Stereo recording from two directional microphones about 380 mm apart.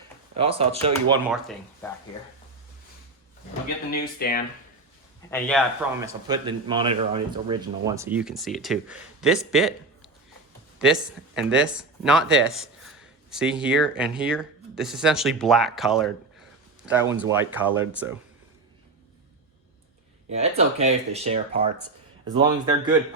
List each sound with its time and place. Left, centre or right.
0.3 s speech: centre
1.3 s speech: centre
3.9 s speech: left
5.3 s speech: centre
6.0 s speech: centre
10.8 s speech: centre
20.3 s speech: centre